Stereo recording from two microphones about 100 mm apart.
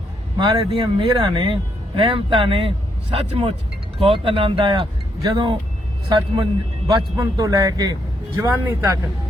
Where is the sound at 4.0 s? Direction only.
60° right (ahead or behind).